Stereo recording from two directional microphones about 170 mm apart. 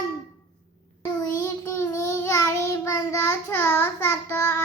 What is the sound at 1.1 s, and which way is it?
Child singing, 20° left (ahead or behind).